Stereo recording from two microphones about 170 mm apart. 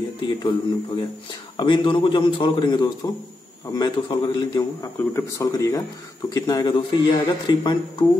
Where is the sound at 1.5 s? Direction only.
30° left (ahead or behind).